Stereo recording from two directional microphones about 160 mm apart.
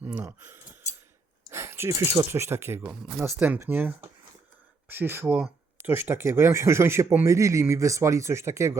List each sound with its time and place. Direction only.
0.0 s speech: 10° right (ahead or behind)